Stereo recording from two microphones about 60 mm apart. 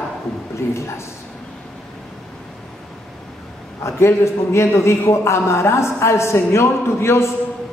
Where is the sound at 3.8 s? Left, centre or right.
Left.